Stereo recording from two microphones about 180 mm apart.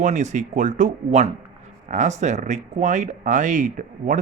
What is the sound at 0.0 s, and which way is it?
Speech, 40° right (ahead or behind).